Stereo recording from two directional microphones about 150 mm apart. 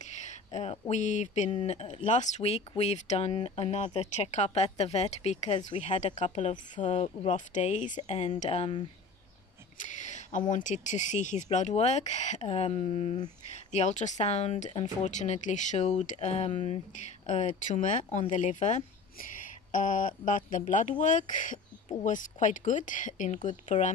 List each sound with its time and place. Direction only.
0.0 s speech: 50° left (ahead or behind)
8.4 s speech: 40° left (ahead or behind)
9.8 s a sound: 55° left (ahead or behind)
10.5 s speech: 55° left (ahead or behind); by 13.2 s 40° left (ahead or behind)
13.7 s speech: 50° left (ahead or behind)
15.0 s speech: 50° left (ahead or behind)